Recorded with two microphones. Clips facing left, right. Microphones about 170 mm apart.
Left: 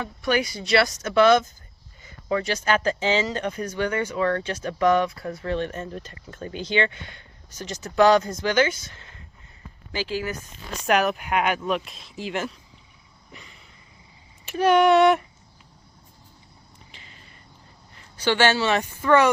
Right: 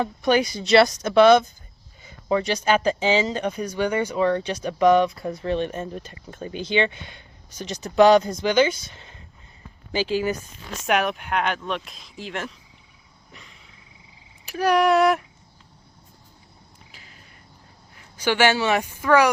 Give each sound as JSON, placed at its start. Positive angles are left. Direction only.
{"t": 0.2, "sound": "speech", "side_deg": -20}
{"t": 10.8, "sound": "speech", "side_deg": 0}
{"t": 13.3, "sound": "a sound", "side_deg": 0}
{"t": 14.4, "sound": "speech", "side_deg": 0}
{"t": 16.9, "sound": "a sound", "side_deg": 0}
{"t": 18.2, "sound": "speech", "side_deg": -10}